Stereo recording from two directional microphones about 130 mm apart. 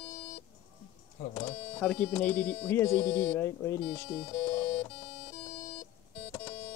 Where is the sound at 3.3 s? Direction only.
20° left (ahead or behind).